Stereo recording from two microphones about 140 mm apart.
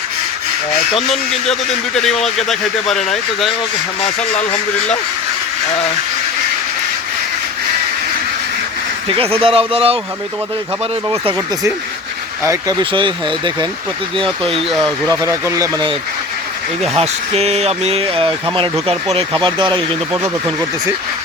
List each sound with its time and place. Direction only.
2.0 s speech: 5° left (ahead or behind)
4.0 s speech: 55° left (ahead or behind)
9.0 s speech: 45° right (ahead or behind)
12.8 s speech: 35° right (ahead or behind)
14.3 s speech: centre (ahead or behind)
15.1 s speech: 20° right (ahead or behind)
16.9 s speech: 45° right (ahead or behind)
20.2 s speech: 25° right (ahead or behind)